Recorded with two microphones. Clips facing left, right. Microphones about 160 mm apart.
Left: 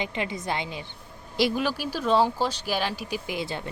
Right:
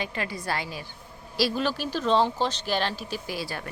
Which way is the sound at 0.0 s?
20° left (ahead or behind).